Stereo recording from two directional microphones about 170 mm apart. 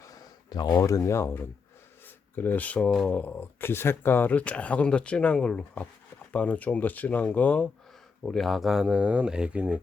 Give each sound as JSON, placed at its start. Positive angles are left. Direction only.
{"t": 0.5, "sound": "speech", "side_deg": 20}